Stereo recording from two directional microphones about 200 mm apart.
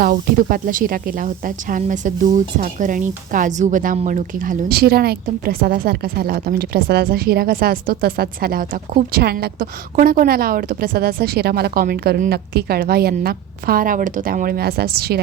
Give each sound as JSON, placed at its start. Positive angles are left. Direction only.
{"t": 0.0, "sound": "speech", "side_deg": -45}